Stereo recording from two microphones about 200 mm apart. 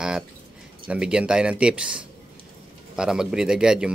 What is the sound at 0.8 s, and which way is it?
Speech, 5° right (ahead or behind).